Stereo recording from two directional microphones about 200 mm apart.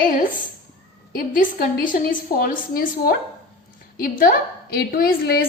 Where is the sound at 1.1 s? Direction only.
45° left (ahead or behind).